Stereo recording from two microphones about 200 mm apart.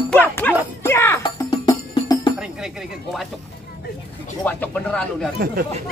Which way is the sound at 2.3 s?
5° right (ahead or behind).